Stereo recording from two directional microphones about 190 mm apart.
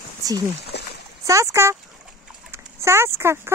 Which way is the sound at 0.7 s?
60° left (ahead or behind).